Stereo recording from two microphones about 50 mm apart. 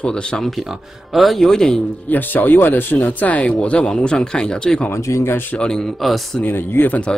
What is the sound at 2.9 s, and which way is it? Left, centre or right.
Speech, left.